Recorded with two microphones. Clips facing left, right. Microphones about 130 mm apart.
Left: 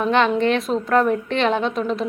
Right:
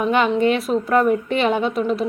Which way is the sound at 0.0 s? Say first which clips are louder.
Right 1 dB; 5° right (ahead or behind).